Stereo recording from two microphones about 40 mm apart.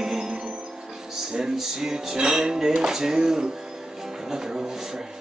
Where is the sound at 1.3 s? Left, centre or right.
Centre.